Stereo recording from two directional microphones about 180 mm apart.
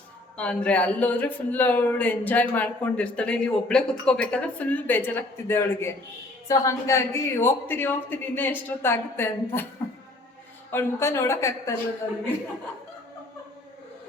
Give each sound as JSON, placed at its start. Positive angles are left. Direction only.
{"t": 0.3, "sound": "speech", "side_deg": 5}
{"t": 10.7, "sound": "speech", "side_deg": 15}